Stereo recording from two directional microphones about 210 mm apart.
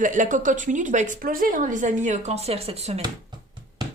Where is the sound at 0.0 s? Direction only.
40° right (ahead or behind).